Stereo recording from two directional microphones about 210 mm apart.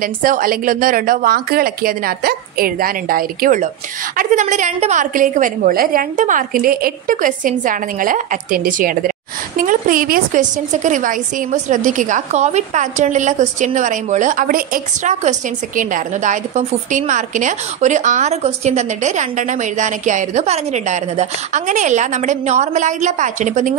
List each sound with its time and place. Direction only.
0.0 s a woman's voice: 40° right (ahead or behind)